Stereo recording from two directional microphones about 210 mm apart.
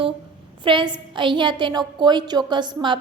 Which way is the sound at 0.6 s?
25° right (ahead or behind).